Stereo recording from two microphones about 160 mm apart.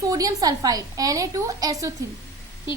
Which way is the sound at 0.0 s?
20° right (ahead or behind).